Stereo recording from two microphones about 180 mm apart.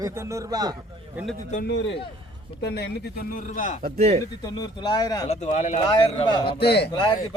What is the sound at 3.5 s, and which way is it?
Speech, 45° left (ahead or behind).